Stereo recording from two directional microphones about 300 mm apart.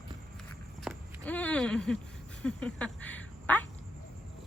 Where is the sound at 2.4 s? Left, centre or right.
Centre.